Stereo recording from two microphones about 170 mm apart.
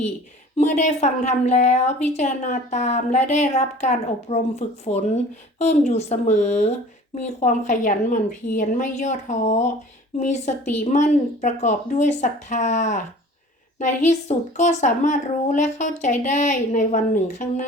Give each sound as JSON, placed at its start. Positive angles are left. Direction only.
{"t": 0.5, "sound": "a woman's voice", "side_deg": 40}